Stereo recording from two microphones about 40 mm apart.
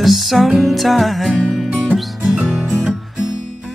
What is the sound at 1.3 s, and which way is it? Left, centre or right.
Music, right.